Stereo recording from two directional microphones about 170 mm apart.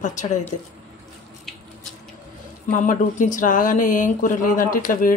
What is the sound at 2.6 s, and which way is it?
Speech, 50° left (ahead or behind).